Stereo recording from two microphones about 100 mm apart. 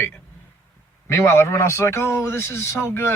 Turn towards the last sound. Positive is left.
turn(degrees=25)  # may be behind; listen again after turning